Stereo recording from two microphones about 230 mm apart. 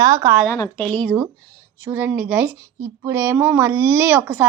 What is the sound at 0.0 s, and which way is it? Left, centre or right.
Speech, centre.